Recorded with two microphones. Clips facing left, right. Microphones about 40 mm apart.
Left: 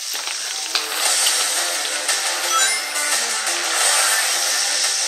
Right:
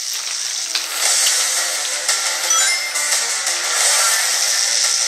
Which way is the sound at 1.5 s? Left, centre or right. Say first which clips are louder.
Even; right.